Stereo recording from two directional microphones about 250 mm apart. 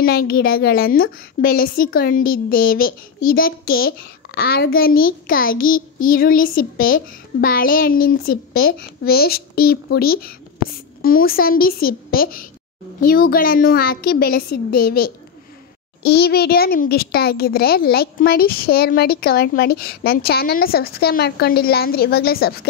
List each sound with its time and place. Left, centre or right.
0.0 s a woman's voice: left